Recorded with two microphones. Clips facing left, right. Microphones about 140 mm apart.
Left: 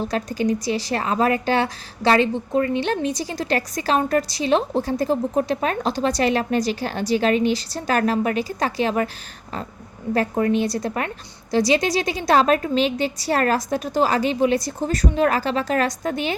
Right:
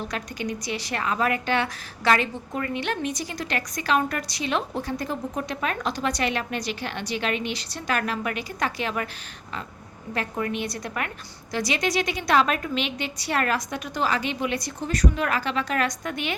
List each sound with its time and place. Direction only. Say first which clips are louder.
0.0 s a woman's voice: left 8 dB; 35° left (ahead or behind)
10.2 s a woman's voice: left 8 dB; 35° left (ahead or behind)